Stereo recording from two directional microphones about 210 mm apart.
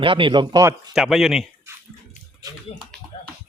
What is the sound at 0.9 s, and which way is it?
Speech, centre (ahead or behind).